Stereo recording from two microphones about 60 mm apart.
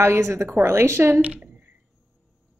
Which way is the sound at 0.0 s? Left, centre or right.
Right.